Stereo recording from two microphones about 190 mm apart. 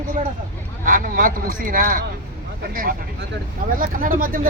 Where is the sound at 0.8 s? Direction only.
45° right (ahead or behind).